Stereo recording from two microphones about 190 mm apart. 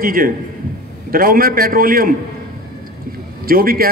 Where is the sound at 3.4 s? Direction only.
50° right (ahead or behind).